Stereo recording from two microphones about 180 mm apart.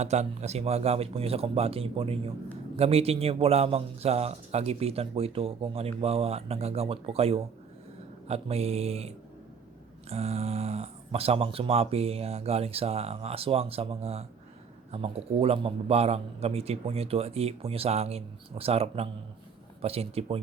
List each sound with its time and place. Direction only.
0.0 s a man's voice: 40° right (ahead or behind)